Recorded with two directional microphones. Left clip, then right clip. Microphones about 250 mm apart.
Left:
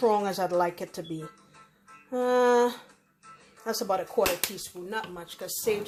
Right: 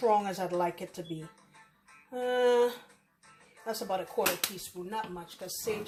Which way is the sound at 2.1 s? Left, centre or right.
Left.